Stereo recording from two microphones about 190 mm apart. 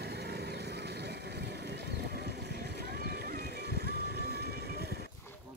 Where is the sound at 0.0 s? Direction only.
60° right (ahead or behind).